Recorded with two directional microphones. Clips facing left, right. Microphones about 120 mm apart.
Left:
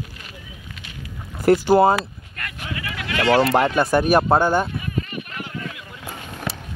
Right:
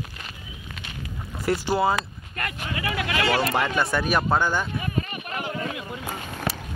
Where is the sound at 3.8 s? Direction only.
50° left (ahead or behind).